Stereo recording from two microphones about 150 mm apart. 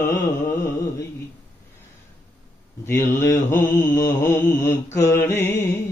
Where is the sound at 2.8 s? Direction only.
15° left (ahead or behind).